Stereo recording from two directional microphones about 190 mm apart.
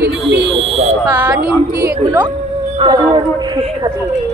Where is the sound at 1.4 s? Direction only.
50° right (ahead or behind).